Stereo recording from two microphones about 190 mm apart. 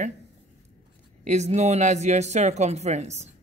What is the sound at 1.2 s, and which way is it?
Speech, 35° right (ahead or behind).